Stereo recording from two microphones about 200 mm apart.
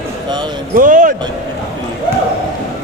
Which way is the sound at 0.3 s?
20° right (ahead or behind).